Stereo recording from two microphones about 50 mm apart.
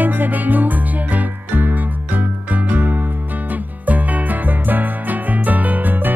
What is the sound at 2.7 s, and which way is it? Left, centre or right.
Music, right.